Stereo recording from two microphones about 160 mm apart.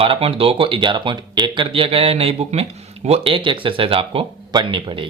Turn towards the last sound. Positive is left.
turn(degrees=-30)  # may be behind; listen again after turning